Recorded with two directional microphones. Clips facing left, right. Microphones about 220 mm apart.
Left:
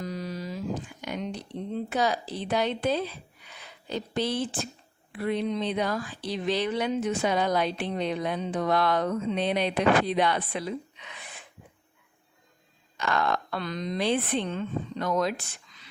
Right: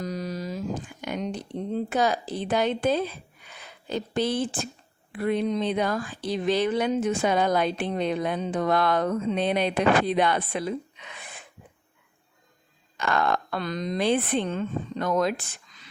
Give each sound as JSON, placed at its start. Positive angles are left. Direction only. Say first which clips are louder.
{"t": 0.0, "sound": "a sound", "louder": "right 3 dB", "side_deg": -45}
{"t": 1.0, "sound": "speech", "louder": "right 4 dB", "side_deg": -50}
{"t": 13.0, "sound": "speech", "louder": "right 2 dB", "side_deg": -50}